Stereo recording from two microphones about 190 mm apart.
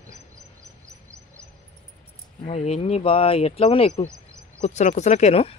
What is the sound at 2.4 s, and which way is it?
Speech, 35° left (ahead or behind).